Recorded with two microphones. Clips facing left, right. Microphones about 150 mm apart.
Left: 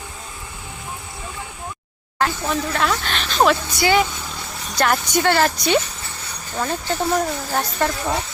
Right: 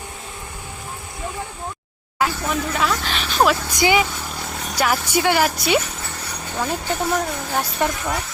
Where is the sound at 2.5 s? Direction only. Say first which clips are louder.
Left 1 dB; 5° right (ahead or behind).